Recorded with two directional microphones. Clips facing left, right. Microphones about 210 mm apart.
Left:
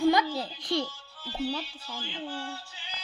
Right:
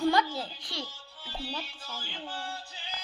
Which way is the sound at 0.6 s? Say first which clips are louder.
Left 11 dB; 50° left (ahead or behind).